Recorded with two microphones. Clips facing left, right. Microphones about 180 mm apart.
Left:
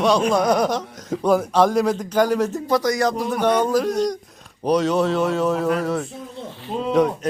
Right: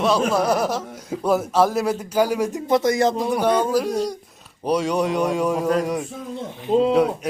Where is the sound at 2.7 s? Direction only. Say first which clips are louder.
Right 3 dB; 25° right (ahead or behind).